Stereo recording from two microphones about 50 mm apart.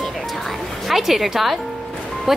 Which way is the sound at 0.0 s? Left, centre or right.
Centre.